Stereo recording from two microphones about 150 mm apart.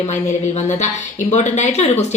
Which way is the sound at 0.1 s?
50° left (ahead or behind).